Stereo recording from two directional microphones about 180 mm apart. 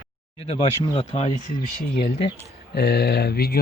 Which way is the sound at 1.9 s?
55° left (ahead or behind).